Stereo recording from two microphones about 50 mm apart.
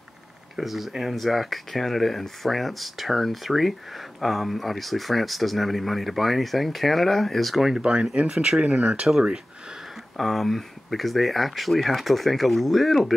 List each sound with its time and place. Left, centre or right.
0.6 s speech: centre
7.8 s speech: right
10.1 s speech: centre